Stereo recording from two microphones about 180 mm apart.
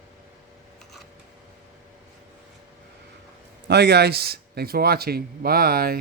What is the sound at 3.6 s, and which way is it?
A man's voice, 65° right (ahead or behind).